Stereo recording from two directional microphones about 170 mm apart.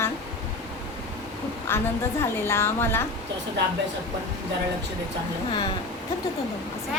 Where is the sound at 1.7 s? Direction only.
15° left (ahead or behind).